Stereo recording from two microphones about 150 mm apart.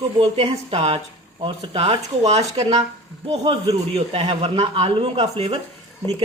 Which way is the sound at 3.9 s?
40° right (ahead or behind).